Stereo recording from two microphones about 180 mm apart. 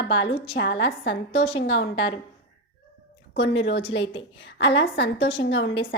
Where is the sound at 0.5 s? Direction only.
75° left (ahead or behind).